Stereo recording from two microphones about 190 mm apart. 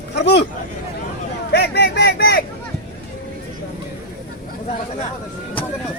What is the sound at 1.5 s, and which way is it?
Speech, 60° left (ahead or behind).